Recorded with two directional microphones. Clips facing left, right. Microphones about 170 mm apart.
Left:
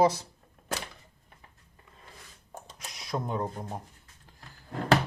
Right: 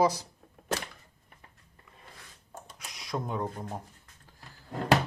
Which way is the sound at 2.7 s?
25° left (ahead or behind).